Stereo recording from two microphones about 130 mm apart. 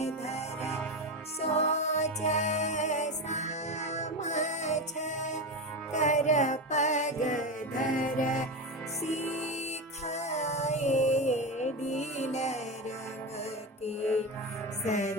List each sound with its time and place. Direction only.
0.0 s music: 55° left (ahead or behind); by 8.4 s 80° left
9.0 s music: 60° left (ahead or behind)